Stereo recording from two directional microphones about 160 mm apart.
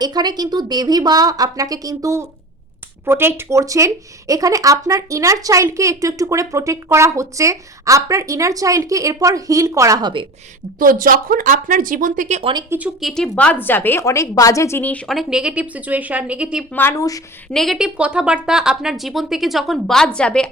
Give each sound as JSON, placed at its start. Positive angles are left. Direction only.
{"t": 0.0, "sound": "speech", "side_deg": -25}
{"t": 10.8, "sound": "speech", "side_deg": -60}
{"t": 12.4, "sound": "speech", "side_deg": -35}
{"t": 13.0, "sound": "a woman's voice", "side_deg": 0}
{"t": 15.0, "sound": "a woman's voice", "side_deg": 0}
{"t": 16.7, "sound": "speech", "side_deg": 15}
{"t": 17.5, "sound": "a woman's voice", "side_deg": 0}